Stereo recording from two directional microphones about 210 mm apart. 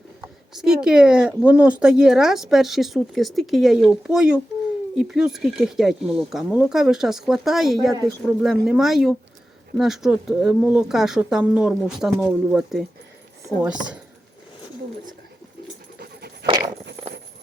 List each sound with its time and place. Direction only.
0.5 s speech: 5° right (ahead or behind)
16.0 s dog: 50° right (ahead or behind)
16.5 s a sound: 20° right (ahead or behind)